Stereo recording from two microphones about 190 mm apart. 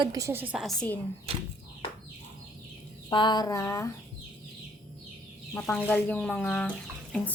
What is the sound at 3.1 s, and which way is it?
Speech, 25° left (ahead or behind).